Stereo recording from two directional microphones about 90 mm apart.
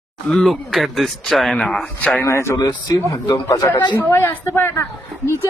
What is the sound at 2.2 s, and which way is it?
Speech, 30° left (ahead or behind).